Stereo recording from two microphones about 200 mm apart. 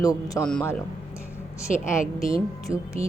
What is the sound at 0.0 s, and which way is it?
Speech, 15° left (ahead or behind).